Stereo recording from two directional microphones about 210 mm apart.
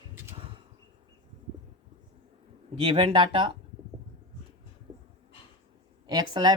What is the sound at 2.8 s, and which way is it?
Speech, 25° right (ahead or behind).